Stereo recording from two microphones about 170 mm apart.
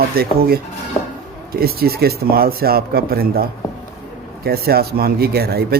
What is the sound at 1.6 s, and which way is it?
Speech, 65° right (ahead or behind).